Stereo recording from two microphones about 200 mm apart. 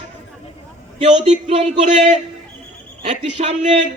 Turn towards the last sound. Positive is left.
turn(degrees=-35)  # may be behind; listen again after turning